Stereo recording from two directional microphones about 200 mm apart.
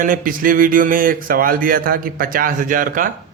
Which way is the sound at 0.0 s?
45° right (ahead or behind).